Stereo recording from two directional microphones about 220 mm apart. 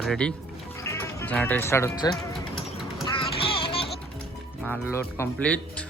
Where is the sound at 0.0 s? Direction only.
5° left (ahead or behind).